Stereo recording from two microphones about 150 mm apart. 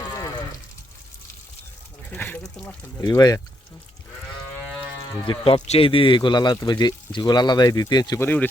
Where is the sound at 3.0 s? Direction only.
25° left (ahead or behind).